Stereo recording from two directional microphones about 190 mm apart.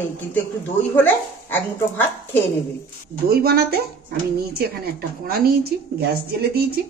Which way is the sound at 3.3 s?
55° right (ahead or behind).